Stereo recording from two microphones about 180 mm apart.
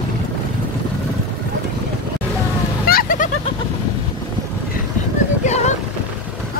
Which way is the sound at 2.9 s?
50° left (ahead or behind).